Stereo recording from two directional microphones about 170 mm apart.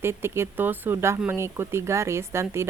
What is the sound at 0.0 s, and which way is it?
Speech, 15° right (ahead or behind).